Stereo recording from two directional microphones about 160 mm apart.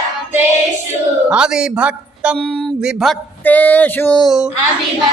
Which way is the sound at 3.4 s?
10° left (ahead or behind).